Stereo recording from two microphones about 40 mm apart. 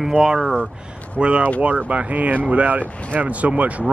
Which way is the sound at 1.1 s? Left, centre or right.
Right.